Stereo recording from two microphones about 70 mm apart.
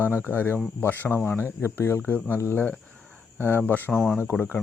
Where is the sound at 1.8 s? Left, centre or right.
Left.